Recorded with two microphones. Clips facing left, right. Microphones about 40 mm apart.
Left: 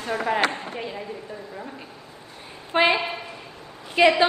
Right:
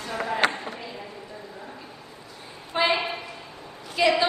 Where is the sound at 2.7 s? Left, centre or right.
Left.